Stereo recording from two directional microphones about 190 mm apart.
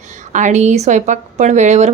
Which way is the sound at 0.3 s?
40° right (ahead or behind).